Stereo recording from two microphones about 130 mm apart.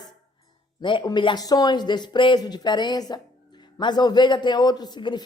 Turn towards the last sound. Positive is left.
turn(degrees=35)  # may be behind; listen again after turning